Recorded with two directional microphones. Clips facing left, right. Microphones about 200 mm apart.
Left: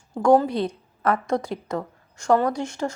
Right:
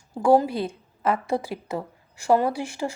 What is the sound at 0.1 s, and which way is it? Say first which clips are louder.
A woman's voice: left 1 dB; 5° right (ahead or behind).